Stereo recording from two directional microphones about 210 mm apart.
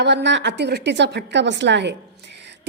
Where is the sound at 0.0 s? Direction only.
55° right (ahead or behind).